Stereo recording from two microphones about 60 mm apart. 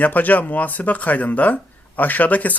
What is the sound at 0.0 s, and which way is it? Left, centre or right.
Speech, left.